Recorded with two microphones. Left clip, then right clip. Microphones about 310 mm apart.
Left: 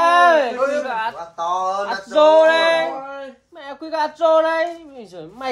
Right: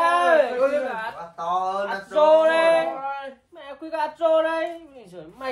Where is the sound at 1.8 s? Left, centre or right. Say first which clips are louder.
Left 4 dB; left.